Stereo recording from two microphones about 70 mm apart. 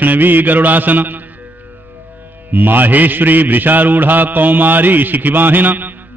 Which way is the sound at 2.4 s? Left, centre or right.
Right.